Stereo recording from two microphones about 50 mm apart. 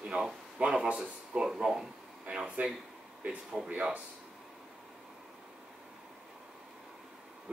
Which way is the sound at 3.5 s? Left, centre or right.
Right.